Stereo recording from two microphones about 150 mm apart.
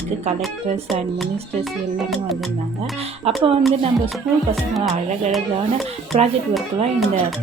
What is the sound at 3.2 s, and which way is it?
Speech, 40° right (ahead or behind).